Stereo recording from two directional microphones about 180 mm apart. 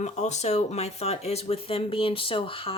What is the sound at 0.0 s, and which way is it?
Speech, 40° left (ahead or behind).